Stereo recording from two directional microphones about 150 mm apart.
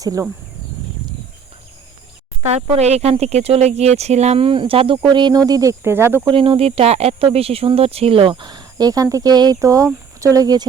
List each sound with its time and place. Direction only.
0.0 s speech: 20° right (ahead or behind)
2.5 s speech: 45° right (ahead or behind); by 6.2 s 15° right (ahead or behind)
6.2 s speech: 35° right (ahead or behind)